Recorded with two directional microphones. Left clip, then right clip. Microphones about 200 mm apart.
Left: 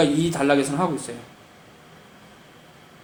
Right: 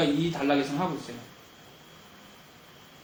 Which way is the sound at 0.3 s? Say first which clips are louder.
Left 6 dB; 50° left (ahead or behind).